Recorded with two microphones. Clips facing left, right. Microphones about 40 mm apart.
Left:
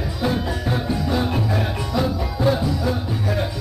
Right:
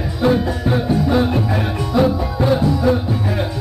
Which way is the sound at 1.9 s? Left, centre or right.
Centre.